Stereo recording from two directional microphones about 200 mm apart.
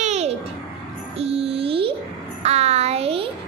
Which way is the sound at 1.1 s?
30° right (ahead or behind).